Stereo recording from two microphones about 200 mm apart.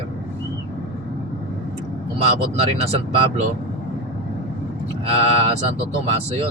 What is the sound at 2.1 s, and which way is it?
Speech, 30° right (ahead or behind).